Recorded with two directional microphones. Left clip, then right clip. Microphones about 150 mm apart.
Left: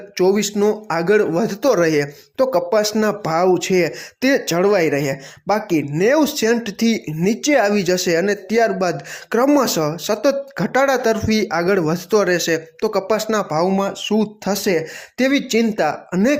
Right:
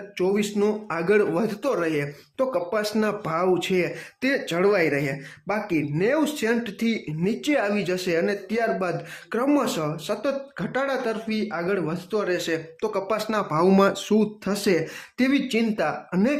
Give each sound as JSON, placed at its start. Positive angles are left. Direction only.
{"t": 0.2, "sound": "speech", "side_deg": 35}
{"t": 1.6, "sound": "speech", "side_deg": 40}
{"t": 13.7, "sound": "speech", "side_deg": -5}
{"t": 14.4, "sound": "speech", "side_deg": 20}
{"t": 15.3, "sound": "speech", "side_deg": 30}